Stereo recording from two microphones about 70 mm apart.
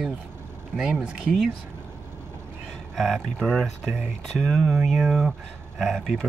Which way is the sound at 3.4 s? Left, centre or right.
Centre.